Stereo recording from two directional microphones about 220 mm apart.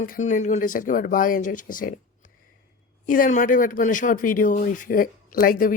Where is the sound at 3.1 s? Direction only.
35° left (ahead or behind).